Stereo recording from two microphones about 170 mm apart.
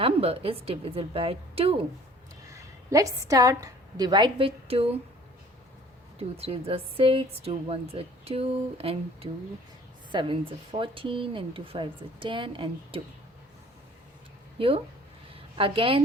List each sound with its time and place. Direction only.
0.0 s a woman's voice: 35° right (ahead or behind)
2.5 s a woman's voice: 20° right (ahead or behind); by 4.9 s 35° right (ahead or behind)
6.1 s a woman's voice: 35° right (ahead or behind)
14.6 s a woman's voice: 35° right (ahead or behind)